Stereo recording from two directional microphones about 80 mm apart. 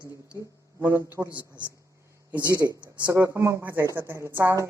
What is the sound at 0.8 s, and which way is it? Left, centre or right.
Speech, right.